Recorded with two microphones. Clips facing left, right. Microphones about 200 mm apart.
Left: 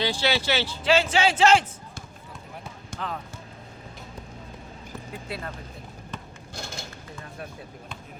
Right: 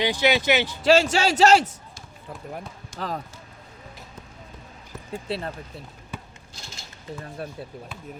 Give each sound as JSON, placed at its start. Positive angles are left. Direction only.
{"t": 0.0, "sound": "speech", "side_deg": -15}
{"t": 0.9, "sound": "a man's voice", "side_deg": -40}
{"t": 2.9, "sound": "speech", "side_deg": 55}
{"t": 5.1, "sound": "a man's voice", "side_deg": -30}
{"t": 6.5, "sound": "a sound", "side_deg": 55}